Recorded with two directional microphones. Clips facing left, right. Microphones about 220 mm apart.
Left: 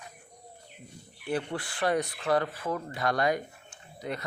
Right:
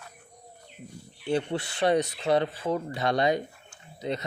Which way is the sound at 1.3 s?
25° right (ahead or behind).